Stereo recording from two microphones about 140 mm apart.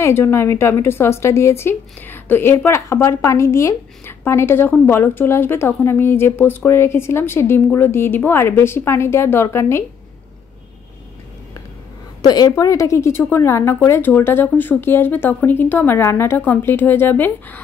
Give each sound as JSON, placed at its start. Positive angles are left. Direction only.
{"t": 0.0, "sound": "a woman's voice", "side_deg": 20}
{"t": 12.2, "sound": "a woman's voice", "side_deg": 30}